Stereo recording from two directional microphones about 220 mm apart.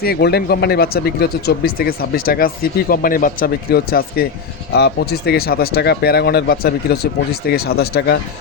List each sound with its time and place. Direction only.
0.0 s speech: 45° left (ahead or behind)